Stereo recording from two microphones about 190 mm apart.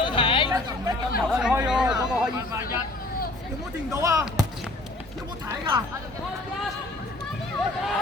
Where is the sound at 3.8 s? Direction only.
20° right (ahead or behind).